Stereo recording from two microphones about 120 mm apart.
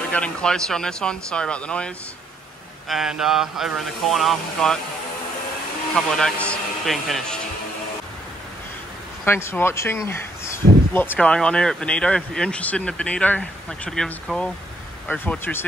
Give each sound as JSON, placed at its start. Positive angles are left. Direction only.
{"t": 0.1, "sound": "speech", "side_deg": 10}
{"t": 2.9, "sound": "speech", "side_deg": -5}
{"t": 5.9, "sound": "speech", "side_deg": 5}
{"t": 9.2, "sound": "speech", "side_deg": 20}